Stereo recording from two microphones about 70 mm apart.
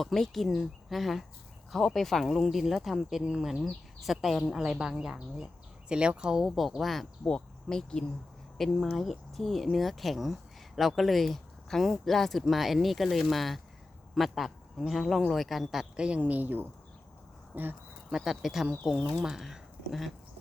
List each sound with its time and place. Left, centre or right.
0.0 s a man's voice: centre; by 17.7 s right
18.1 s speech: centre